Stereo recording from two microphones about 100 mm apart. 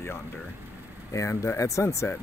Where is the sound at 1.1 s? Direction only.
30° left (ahead or behind).